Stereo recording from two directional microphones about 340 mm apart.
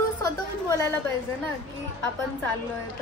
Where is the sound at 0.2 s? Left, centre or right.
Centre.